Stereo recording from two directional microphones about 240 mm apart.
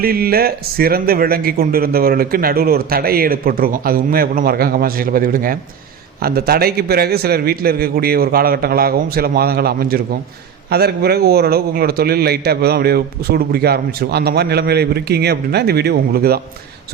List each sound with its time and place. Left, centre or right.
0.0 s a man's voice: right